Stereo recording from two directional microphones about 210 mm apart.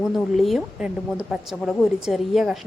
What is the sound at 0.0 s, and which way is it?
A woman's voice, centre (ahead or behind).